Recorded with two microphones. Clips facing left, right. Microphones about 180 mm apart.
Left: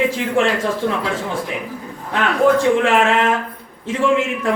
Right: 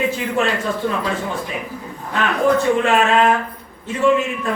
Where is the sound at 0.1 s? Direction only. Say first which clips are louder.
Left 2 dB; 85° left.